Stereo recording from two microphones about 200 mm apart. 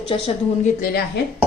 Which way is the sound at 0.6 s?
50° left (ahead or behind).